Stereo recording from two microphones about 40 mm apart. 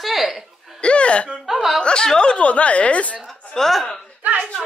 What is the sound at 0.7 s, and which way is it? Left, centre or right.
Speech, left.